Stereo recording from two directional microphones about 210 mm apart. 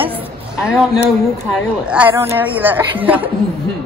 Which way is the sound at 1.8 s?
5° right (ahead or behind).